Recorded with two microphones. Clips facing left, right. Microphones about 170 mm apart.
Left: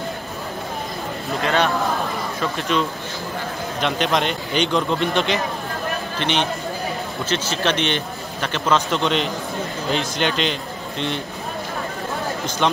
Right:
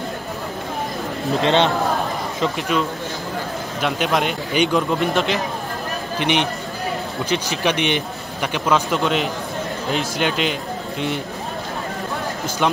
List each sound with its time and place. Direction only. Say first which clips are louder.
1.4 s speech: right 3 dB; 25° right (ahead or behind)
2.7 s speech: right 1 dB; 5° right (ahead or behind)
6.1 s speech: right 4 dB; 15° right (ahead or behind)